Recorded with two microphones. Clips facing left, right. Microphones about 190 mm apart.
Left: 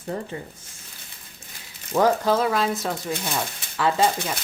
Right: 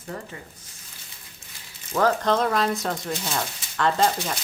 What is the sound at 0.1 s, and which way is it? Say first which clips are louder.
Speech: left 5 dB; 30° left (ahead or behind).